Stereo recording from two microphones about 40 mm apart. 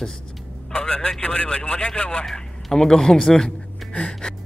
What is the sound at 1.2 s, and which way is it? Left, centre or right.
Vehicle, left.